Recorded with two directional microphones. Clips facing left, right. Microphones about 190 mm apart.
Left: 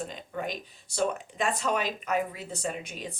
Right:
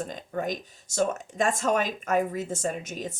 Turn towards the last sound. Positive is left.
turn(degrees=-45)  # may be behind; listen again after turning